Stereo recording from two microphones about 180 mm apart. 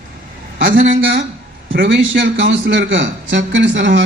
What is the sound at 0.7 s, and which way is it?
A man's voice, 90° right.